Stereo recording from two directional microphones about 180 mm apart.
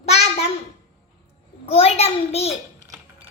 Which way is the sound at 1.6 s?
35° left (ahead or behind).